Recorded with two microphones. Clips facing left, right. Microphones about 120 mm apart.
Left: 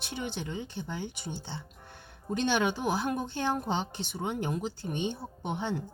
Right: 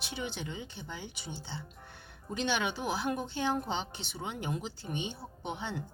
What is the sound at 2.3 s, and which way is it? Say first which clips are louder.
Speech: left 5 dB; 45° left (ahead or behind).